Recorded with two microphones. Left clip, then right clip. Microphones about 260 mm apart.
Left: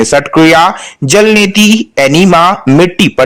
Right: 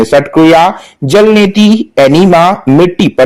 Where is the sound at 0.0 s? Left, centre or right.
Centre.